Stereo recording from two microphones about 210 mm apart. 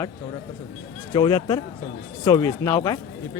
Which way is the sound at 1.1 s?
20° left (ahead or behind).